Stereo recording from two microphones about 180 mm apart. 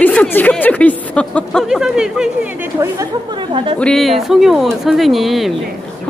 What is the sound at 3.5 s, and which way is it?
Speech, 30° right (ahead or behind).